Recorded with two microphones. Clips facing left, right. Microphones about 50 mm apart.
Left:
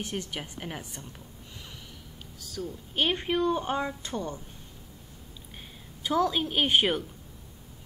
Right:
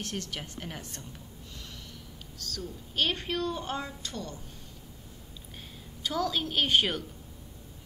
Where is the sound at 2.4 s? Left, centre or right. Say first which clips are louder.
Left 3 dB; centre.